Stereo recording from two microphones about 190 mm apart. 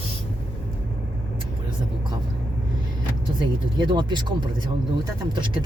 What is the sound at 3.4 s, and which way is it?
Speech, 25° right (ahead or behind).